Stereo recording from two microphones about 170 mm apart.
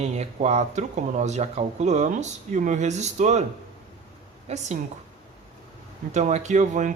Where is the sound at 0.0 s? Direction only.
40° right (ahead or behind).